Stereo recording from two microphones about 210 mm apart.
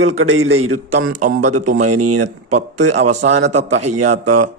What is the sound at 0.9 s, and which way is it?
Speech, 50° right (ahead or behind).